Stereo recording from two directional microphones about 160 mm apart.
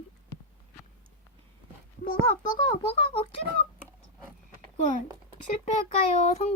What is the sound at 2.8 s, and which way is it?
Speech, 35° left (ahead or behind).